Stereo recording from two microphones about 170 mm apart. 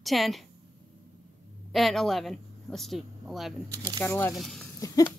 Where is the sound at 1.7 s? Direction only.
Centre (ahead or behind).